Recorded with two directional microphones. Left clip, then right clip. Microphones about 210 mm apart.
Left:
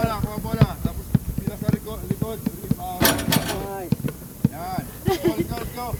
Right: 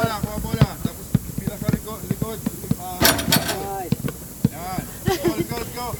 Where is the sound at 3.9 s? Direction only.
Centre (ahead or behind).